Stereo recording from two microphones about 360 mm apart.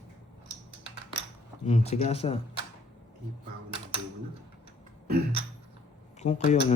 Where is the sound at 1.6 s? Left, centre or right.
Centre.